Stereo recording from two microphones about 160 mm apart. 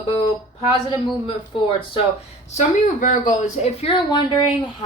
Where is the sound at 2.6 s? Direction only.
50° left (ahead or behind); by 4.2 s 30° left (ahead or behind).